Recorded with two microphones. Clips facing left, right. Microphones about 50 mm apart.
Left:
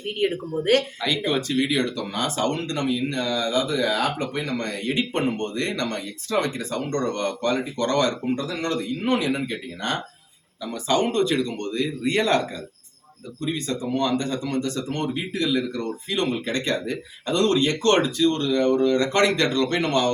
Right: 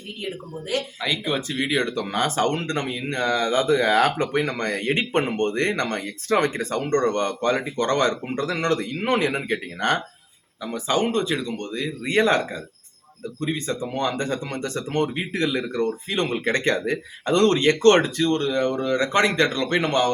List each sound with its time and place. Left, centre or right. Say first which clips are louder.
0.2 s a woman's voice: left 9 dB; left
1.0 s speech: left 1 dB; centre; by 8.4 s right
8.4 s speech: right 3 dB; right
10.8 s speech: left 1 dB; right
12.1 s speech: right 2 dB; right
13.4 s speech: even; right